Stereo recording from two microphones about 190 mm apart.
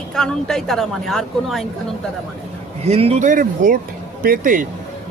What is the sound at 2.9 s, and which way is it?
Speech, 35° right (ahead or behind).